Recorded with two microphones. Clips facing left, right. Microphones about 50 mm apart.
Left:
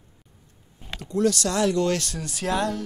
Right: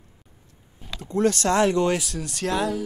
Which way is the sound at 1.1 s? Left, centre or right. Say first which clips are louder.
Right 2 dB; right.